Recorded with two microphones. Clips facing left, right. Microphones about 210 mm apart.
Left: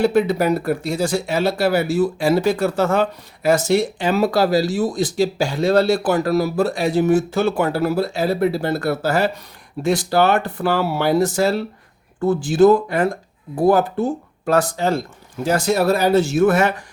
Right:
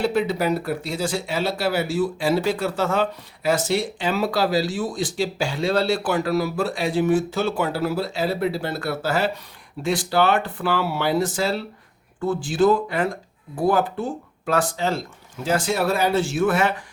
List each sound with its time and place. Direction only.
0.0 s speech: 50° left (ahead or behind)